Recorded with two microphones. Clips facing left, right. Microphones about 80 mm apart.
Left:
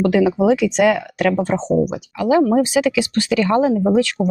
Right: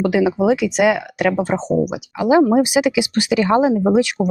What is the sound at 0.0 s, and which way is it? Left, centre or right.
Speech, centre.